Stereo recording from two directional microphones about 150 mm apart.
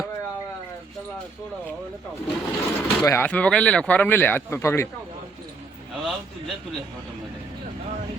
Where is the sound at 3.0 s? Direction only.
15° left (ahead or behind).